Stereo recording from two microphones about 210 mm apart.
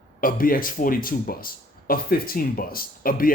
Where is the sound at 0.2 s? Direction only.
40° left (ahead or behind).